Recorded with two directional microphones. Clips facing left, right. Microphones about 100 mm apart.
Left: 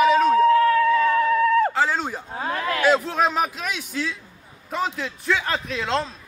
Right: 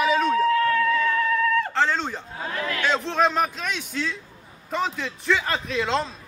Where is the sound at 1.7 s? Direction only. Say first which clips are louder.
Left 1 dB; 5° left (ahead or behind).